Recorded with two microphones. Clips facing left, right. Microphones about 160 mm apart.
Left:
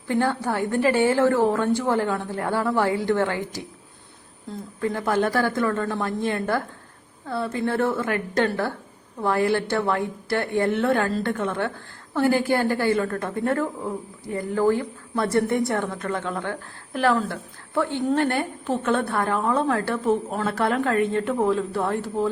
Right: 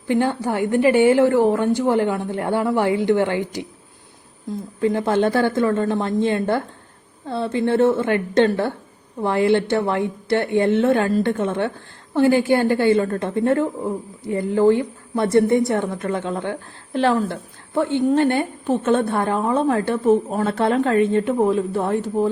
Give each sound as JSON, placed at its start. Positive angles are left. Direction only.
{"t": 0.1, "sound": "a woman's voice", "side_deg": -15}
{"t": 4.8, "sound": "a woman's voice", "side_deg": -20}